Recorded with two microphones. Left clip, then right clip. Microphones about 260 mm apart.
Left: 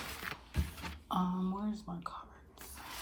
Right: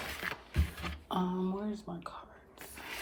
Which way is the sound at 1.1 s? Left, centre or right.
Left.